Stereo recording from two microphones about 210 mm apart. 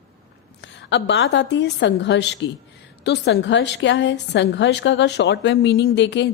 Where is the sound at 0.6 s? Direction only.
55° left (ahead or behind).